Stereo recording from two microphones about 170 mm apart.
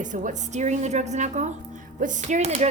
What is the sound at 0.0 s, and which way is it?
A woman's voice, 50° right (ahead or behind).